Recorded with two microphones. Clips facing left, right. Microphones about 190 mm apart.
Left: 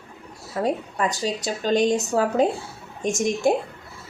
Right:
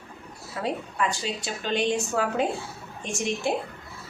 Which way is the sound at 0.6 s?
40° left (ahead or behind).